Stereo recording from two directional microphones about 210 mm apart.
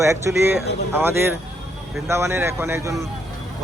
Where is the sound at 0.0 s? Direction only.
15° right (ahead or behind).